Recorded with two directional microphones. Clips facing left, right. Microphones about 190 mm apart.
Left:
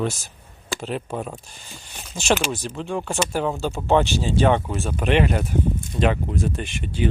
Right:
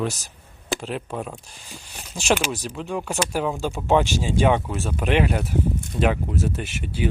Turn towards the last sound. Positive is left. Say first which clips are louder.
# left 1 dB
turn(degrees=-10)  # may be behind; listen again after turning